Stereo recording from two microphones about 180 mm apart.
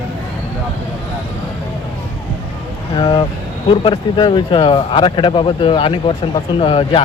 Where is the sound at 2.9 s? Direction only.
25° left (ahead or behind).